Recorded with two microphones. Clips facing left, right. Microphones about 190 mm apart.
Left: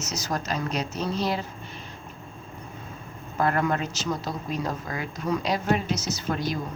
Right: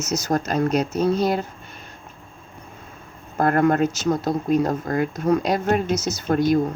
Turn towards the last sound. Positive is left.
turn(degrees=-50)  # may be behind; listen again after turning